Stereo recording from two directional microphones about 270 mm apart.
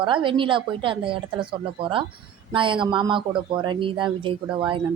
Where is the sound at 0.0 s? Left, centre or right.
Centre.